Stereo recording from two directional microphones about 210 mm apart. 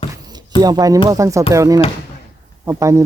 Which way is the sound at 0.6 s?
15° right (ahead or behind).